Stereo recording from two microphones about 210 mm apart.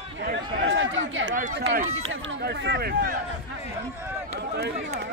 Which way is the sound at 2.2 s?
60° right (ahead or behind).